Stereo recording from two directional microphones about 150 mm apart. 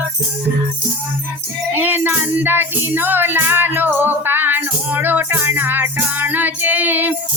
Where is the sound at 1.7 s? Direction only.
10° right (ahead or behind).